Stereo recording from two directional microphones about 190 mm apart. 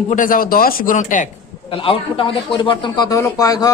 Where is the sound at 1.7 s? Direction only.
30° left (ahead or behind).